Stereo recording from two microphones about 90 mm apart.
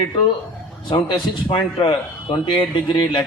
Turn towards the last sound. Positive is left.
turn(degrees=60)  # may be behind; listen again after turning